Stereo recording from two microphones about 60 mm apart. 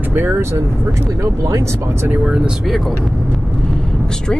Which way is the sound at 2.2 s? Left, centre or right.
Centre.